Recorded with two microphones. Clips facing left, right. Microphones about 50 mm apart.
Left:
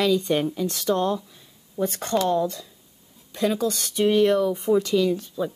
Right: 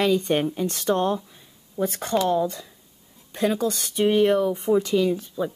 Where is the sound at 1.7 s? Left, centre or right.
Centre.